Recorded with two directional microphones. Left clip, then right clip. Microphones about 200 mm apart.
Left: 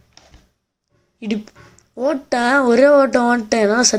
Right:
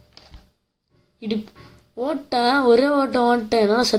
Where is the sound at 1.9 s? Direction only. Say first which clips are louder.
Left 4 dB; 20° left (ahead or behind).